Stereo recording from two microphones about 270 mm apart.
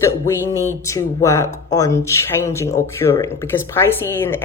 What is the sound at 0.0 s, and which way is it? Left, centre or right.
Speech, centre.